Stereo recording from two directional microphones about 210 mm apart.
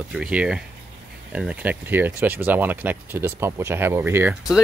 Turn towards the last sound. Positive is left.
turn(degrees=-5)  # may be behind; listen again after turning